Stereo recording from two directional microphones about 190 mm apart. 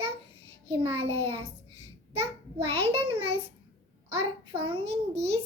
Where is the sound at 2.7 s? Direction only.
30° right (ahead or behind).